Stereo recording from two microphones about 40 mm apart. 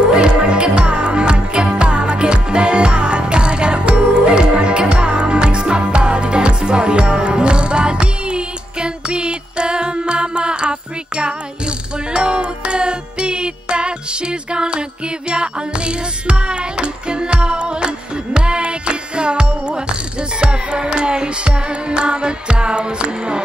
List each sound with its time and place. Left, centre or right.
0.0 s music: right